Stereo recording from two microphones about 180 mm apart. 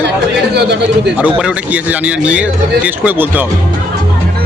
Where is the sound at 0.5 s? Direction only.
70° right (ahead or behind).